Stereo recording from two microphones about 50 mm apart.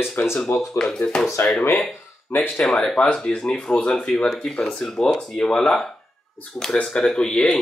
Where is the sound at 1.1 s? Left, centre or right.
Centre.